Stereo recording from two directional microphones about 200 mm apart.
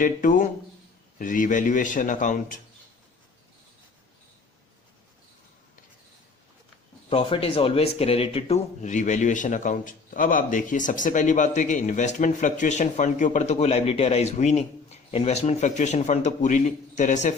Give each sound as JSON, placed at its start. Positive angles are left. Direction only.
{"t": 0.0, "sound": "speech", "side_deg": 40}
{"t": 7.1, "sound": "speech", "side_deg": 25}